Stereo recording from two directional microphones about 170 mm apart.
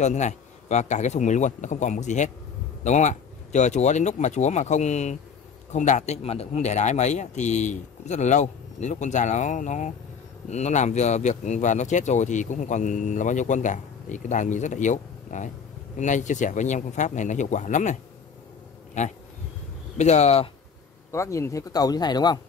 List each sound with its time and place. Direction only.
0.0 s speech: 45° left (ahead or behind)
19.0 s speech: 45° left (ahead or behind)
21.1 s speech: 15° left (ahead or behind)